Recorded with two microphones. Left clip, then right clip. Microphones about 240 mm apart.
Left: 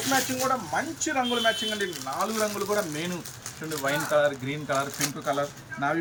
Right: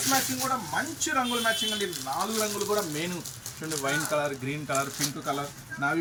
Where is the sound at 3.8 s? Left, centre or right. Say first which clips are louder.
Left 4 dB; centre.